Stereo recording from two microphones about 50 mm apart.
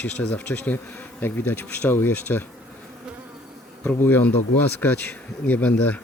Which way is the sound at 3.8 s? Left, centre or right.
Left.